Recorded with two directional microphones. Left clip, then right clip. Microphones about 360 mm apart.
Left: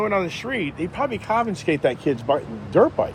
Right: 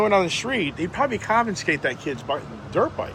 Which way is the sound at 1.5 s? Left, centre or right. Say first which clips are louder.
Left 2 dB; centre.